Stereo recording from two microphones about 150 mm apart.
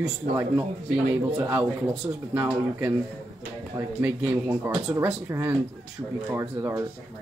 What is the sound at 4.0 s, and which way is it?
Speech, 15° right (ahead or behind).